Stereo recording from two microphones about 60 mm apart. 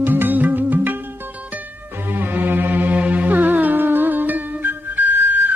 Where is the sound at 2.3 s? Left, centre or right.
Right.